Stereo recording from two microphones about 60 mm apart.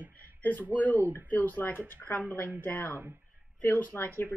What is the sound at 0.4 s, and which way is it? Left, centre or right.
Speech, left.